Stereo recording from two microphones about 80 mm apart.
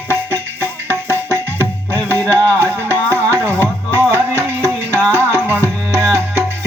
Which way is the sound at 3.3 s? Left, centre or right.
Right.